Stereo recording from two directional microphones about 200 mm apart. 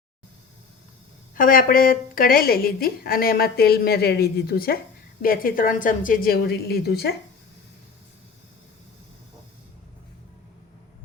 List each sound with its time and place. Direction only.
1.4 s a woman's voice: 45° left (ahead or behind)